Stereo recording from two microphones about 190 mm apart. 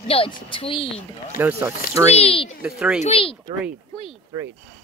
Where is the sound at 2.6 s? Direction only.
5° right (ahead or behind).